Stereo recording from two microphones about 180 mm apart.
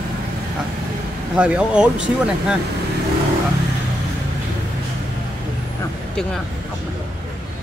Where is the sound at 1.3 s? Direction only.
5° right (ahead or behind).